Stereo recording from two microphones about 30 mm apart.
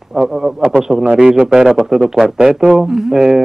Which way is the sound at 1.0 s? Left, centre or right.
Right.